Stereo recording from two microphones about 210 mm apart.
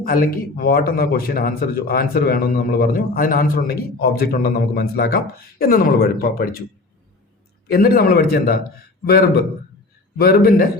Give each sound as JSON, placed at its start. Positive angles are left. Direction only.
{"t": 0.0, "sound": "a man's voice", "side_deg": 45}
{"t": 7.7, "sound": "a man's voice", "side_deg": 45}